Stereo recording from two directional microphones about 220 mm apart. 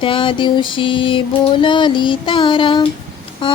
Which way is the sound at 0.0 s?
25° left (ahead or behind).